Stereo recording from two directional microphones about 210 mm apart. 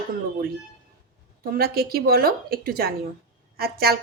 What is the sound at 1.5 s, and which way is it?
A woman's voice, 45° right (ahead or behind).